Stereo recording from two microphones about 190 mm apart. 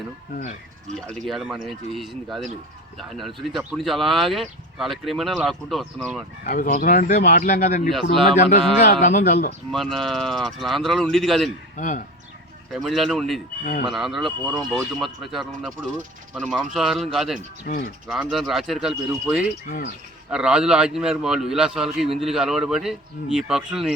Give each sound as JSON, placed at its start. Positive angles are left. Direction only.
{"t": 1.1, "sound": "speech", "side_deg": 0}
{"t": 6.4, "sound": "speech", "side_deg": 50}
{"t": 9.7, "sound": "speech", "side_deg": 0}
{"t": 11.8, "sound": "speech", "side_deg": 45}
{"t": 12.7, "sound": "speech", "side_deg": 0}
{"t": 17.7, "sound": "speech", "side_deg": 55}
{"t": 18.1, "sound": "speech", "side_deg": 0}